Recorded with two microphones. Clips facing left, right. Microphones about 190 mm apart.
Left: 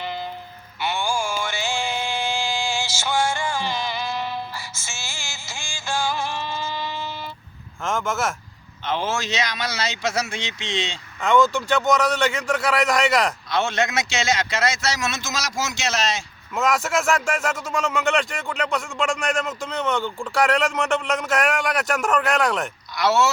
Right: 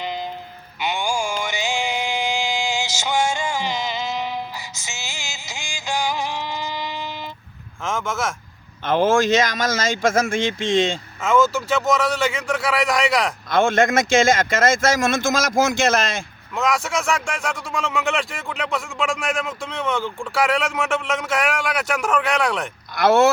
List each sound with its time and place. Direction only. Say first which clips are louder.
0.0 s music: right 2 dB; 15° right (ahead or behind)
0.8 s a sound: right 1 dB; 20° right (ahead or behind)
7.9 s speech: even; centre (ahead or behind)
8.8 s speech: right 8 dB; 50° right (ahead or behind)
11.2 s speech: even; 5° right (ahead or behind)
13.5 s speech: right 10 dB; 50° right (ahead or behind)
16.6 s speech: even; centre (ahead or behind)
23.0 s speech: right 5 dB; 55° right (ahead or behind)